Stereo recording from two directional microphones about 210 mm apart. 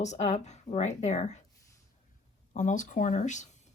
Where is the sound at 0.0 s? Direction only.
35° left (ahead or behind).